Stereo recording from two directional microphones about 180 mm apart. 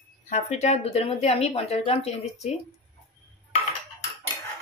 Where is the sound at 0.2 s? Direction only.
40° left (ahead or behind).